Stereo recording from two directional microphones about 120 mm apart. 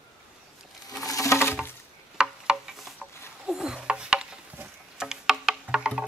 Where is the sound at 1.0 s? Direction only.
25° left (ahead or behind).